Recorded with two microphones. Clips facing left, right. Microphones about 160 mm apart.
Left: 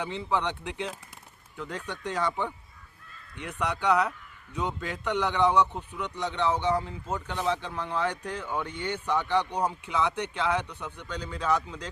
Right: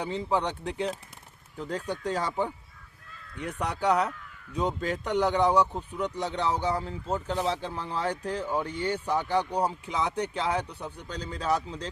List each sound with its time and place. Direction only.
0.0 s speech: 35° right (ahead or behind)
3.6 s speech: 35° right (ahead or behind)
9.4 s speech: 10° right (ahead or behind)
9.6 s speech: 35° right (ahead or behind)